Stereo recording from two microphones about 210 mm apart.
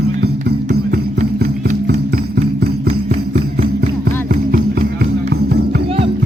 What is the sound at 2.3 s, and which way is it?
Music, 50° right (ahead or behind).